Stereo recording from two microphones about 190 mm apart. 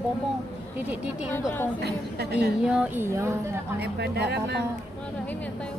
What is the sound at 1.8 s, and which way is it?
Speech, 60° right (ahead or behind).